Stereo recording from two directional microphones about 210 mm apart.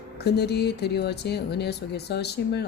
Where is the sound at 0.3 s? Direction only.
50° left (ahead or behind).